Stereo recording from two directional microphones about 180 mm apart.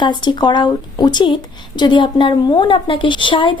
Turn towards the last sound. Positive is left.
turn(degrees=25)  # may be behind; listen again after turning